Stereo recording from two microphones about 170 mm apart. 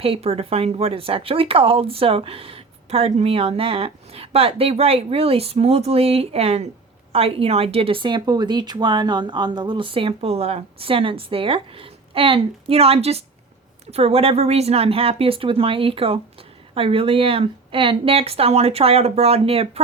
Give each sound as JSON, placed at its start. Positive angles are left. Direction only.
{"t": 0.0, "sound": "a woman's voice", "side_deg": -35}